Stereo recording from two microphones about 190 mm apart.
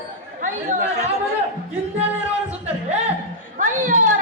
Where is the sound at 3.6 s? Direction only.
40° right (ahead or behind).